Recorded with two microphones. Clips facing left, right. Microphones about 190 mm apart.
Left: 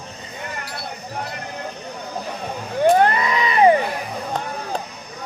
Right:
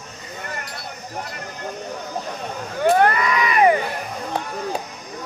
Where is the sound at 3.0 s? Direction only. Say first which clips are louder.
Even; 25° left (ahead or behind).